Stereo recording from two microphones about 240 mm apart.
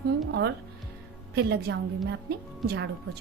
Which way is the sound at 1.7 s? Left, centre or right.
Right.